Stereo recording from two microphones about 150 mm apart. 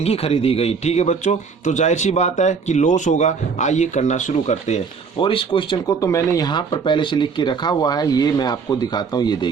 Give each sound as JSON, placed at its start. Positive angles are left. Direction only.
{"t": 0.0, "sound": "a man's voice", "side_deg": 40}
{"t": 5.2, "sound": "speech", "side_deg": 35}
{"t": 6.0, "sound": "speech", "side_deg": 20}